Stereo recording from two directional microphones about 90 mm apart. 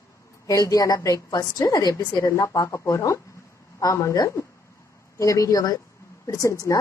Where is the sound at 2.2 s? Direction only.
35° left (ahead or behind).